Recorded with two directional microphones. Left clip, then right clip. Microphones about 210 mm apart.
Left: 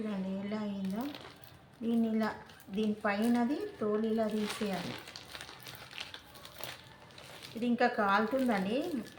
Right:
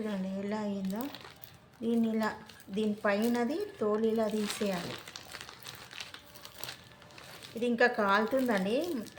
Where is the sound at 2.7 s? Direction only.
40° right (ahead or behind).